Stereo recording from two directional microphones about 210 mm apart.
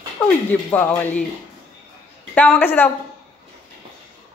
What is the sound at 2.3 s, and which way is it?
Speech, 5° left (ahead or behind).